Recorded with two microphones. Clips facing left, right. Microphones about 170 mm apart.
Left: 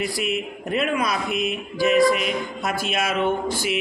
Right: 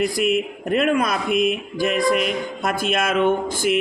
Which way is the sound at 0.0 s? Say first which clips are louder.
Right 6 dB; 50° right (ahead or behind).